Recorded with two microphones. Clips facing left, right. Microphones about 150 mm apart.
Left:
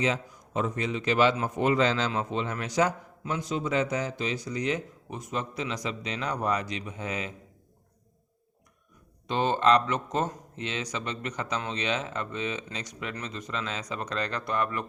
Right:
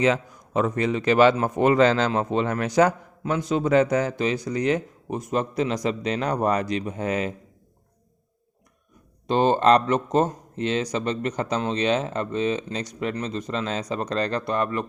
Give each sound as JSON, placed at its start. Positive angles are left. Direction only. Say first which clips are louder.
{"t": 0.0, "sound": "a man's voice", "louder": "right 7 dB", "side_deg": -65}
{"t": 9.2, "sound": "speech", "louder": "right 6 dB", "side_deg": -35}